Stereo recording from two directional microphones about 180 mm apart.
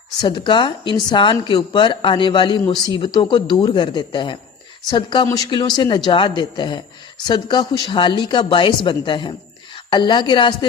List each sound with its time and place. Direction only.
0.2 s a woman's voice: 25° left (ahead or behind)